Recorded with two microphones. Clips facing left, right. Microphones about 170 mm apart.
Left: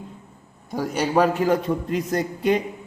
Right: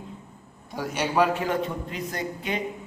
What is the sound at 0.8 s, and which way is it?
A man's voice, 40° left (ahead or behind).